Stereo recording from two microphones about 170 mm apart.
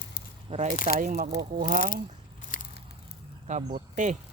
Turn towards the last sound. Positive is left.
turn(degrees=-45)  # may be behind; listen again after turning